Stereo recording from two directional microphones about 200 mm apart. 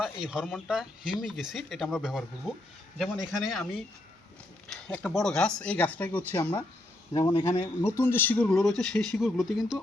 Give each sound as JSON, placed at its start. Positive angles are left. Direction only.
{"t": 0.0, "sound": "speech", "side_deg": -5}
{"t": 4.7, "sound": "speech", "side_deg": 0}
{"t": 7.1, "sound": "speech", "side_deg": 20}